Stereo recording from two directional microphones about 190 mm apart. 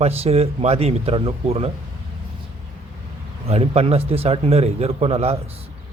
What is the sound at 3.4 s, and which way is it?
Speech, 30° right (ahead or behind).